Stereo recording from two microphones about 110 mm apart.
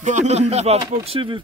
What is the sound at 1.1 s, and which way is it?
Speech, 50° right (ahead or behind).